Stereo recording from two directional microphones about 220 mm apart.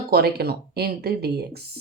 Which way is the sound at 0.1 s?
45° right (ahead or behind).